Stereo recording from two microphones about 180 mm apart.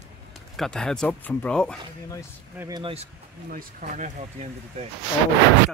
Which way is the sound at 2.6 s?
20° right (ahead or behind).